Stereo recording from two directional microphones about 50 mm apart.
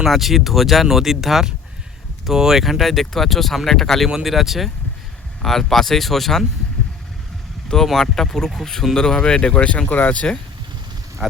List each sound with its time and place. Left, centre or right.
0.0 s speech: centre
7.9 s speech: centre; by 10.3 s left
11.2 s speech: centre